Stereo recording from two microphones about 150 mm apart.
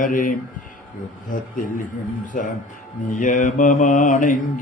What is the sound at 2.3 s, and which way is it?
Mantra, 65° left (ahead or behind).